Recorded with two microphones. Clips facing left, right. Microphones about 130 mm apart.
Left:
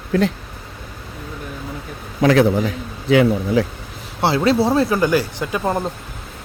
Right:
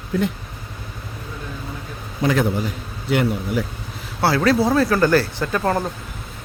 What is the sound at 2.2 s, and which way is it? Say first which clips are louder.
A man's voice: left 6 dB; 90° left.